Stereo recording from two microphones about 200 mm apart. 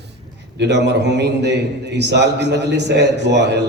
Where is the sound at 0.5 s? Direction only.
60° right (ahead or behind).